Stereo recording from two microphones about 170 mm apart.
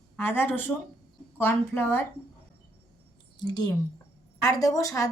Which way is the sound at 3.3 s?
25° left (ahead or behind).